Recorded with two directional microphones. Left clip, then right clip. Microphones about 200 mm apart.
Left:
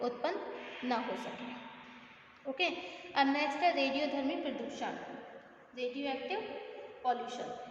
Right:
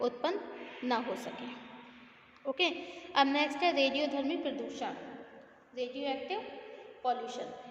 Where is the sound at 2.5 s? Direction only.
45° right (ahead or behind).